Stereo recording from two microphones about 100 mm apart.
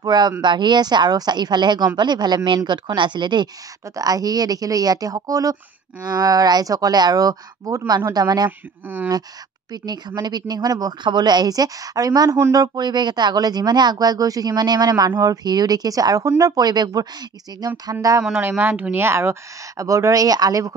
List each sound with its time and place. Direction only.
0.0 s speech: 45° right (ahead or behind)
3.9 s speech: 40° right (ahead or behind)
8.5 s speech: 20° right (ahead or behind)
9.7 s speech: 45° right (ahead or behind)
18.6 s speech: 20° right (ahead or behind); by 20.7 s 35° right (ahead or behind)